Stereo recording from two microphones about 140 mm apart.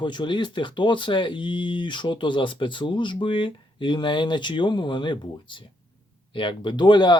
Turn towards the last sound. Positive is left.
turn(degrees=30)  # may be behind; listen again after turning